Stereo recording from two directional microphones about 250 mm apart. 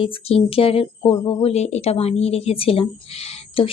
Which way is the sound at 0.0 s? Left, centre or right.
Left.